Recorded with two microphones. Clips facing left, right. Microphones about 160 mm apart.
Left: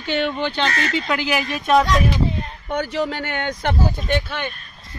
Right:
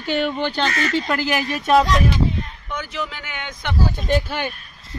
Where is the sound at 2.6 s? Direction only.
35° left (ahead or behind).